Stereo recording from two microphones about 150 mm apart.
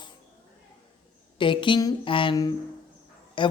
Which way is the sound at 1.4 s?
35° left (ahead or behind).